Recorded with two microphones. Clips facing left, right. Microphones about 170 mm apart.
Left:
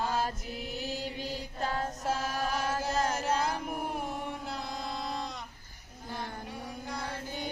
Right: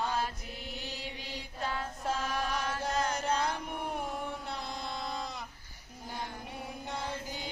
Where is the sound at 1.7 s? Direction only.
40° left (ahead or behind).